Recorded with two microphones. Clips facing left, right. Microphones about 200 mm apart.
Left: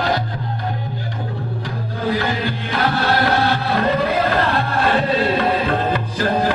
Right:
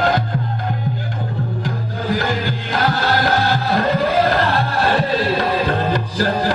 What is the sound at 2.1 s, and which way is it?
Music, 45° right (ahead or behind).